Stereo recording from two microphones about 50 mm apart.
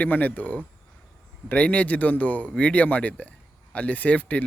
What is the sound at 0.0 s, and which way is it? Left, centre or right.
Speech, left.